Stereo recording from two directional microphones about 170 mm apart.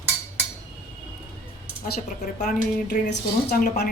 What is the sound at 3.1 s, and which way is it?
Speech, 65° left (ahead or behind).